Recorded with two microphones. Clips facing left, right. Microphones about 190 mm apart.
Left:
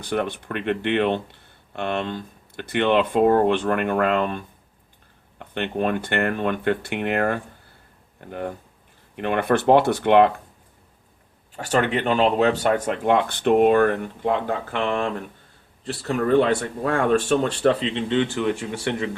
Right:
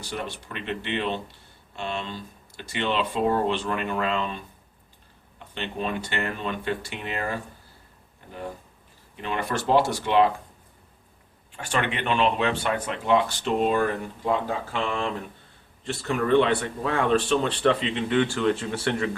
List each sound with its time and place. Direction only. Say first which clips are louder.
0.0 s speech: left 8 dB; 55° left (ahead or behind)
11.5 s speech: left 6 dB; 40° left (ahead or behind); by 15.1 s 55° left (ahead or behind)
15.8 s speech: left 3 dB; 35° left (ahead or behind); by 19.1 s 20° left (ahead or behind)